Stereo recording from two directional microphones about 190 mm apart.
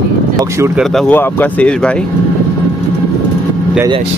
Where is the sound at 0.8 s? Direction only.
Centre (ahead or behind).